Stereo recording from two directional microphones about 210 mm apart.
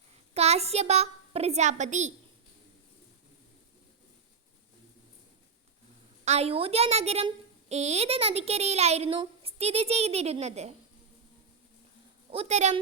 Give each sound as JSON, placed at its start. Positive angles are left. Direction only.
{"t": 0.3, "sound": "a child's voice", "side_deg": -30}
{"t": 6.2, "sound": "a woman's voice", "side_deg": -30}
{"t": 12.3, "sound": "a woman's voice", "side_deg": -30}